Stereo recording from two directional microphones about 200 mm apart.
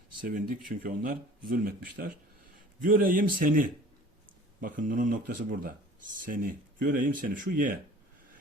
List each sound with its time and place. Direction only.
0.3 s speech: 45° right (ahead or behind)